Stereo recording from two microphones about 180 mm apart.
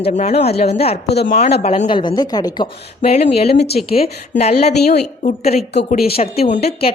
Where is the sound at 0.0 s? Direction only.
40° left (ahead or behind).